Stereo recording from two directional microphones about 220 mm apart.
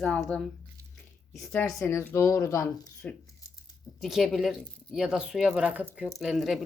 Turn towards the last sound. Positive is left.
turn(degrees=0)  # may be behind; listen again after turning